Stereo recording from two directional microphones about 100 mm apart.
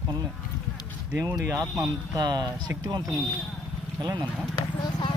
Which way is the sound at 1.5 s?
30° right (ahead or behind).